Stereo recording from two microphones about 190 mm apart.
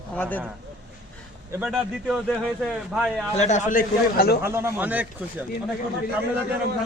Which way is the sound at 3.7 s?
50° left (ahead or behind).